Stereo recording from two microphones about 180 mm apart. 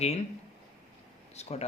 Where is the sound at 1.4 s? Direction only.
35° left (ahead or behind).